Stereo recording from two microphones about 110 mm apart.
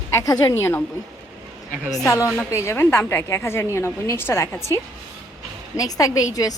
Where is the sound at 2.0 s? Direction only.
25° left (ahead or behind).